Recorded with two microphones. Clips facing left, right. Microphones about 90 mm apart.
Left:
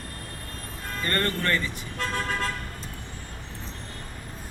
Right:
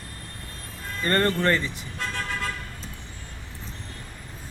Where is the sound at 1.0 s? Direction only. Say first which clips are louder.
Right 5 dB; 25° right (ahead or behind).